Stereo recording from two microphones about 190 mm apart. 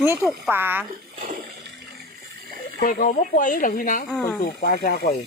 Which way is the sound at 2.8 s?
50° left (ahead or behind).